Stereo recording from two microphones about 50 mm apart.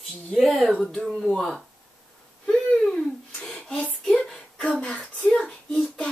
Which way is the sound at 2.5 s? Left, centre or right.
Centre.